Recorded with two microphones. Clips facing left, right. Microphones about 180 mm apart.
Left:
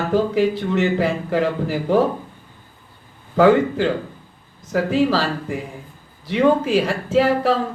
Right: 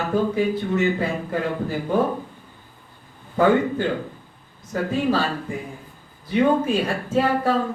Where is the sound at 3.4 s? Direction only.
90° left.